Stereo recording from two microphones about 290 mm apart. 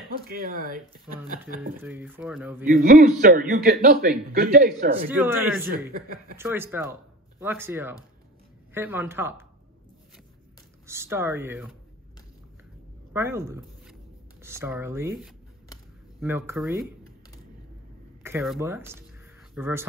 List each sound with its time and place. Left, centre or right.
0.3 s a man's voice: right
1.8 s speech: centre
2.7 s a man's voice: right
5.0 s speech: centre
10.9 s speech: centre
13.1 s speech: centre
18.2 s speech: centre